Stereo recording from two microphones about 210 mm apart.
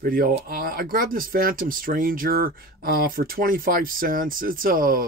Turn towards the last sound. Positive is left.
turn(degrees=-40)  # may be behind; listen again after turning